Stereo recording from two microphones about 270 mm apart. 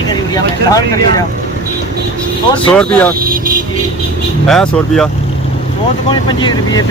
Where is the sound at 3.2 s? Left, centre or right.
Right.